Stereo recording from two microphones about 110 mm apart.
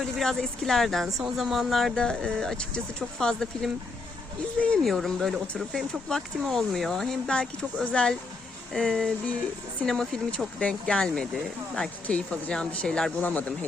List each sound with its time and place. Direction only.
0.2 s speech: 5° left (ahead or behind)